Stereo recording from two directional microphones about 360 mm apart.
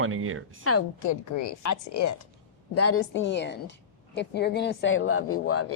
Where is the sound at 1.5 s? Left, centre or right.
Left.